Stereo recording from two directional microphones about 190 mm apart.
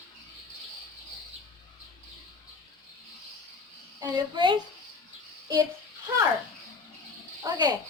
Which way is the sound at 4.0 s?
20° right (ahead or behind).